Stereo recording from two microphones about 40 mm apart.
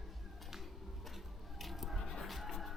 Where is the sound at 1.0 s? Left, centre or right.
Centre.